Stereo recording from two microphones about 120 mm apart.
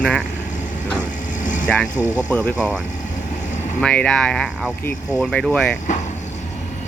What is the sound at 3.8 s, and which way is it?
Speech, 10° left (ahead or behind).